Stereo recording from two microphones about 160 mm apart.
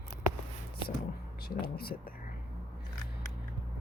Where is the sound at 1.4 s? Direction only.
70° left (ahead or behind).